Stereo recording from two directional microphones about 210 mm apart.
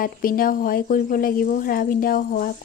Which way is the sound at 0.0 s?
40° left (ahead or behind).